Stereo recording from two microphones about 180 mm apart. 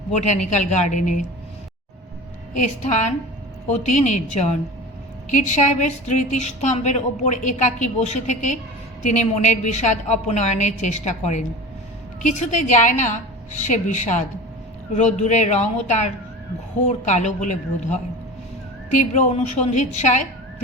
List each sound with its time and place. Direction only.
0.2 s a woman's voice: 40° left (ahead or behind)
2.6 s a woman's voice: 40° left (ahead or behind)
18.9 s a woman's voice: 45° left (ahead or behind)